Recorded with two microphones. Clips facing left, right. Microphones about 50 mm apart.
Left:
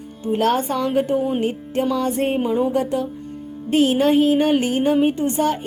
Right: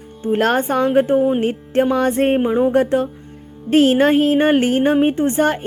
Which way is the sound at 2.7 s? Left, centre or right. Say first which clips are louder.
Right 5 dB; right.